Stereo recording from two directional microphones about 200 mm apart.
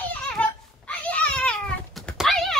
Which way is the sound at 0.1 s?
5° left (ahead or behind).